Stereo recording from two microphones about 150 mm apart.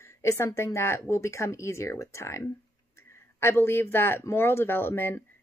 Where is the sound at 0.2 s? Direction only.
20° left (ahead or behind).